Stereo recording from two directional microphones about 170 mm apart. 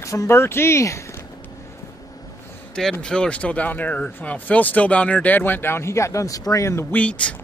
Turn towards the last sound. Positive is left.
turn(degrees=10)  # may be behind; listen again after turning